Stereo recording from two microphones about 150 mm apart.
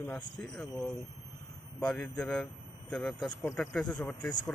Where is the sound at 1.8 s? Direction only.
5° left (ahead or behind).